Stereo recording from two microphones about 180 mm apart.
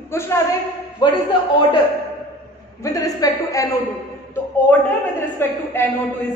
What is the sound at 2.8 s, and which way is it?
Speech, 20° left (ahead or behind).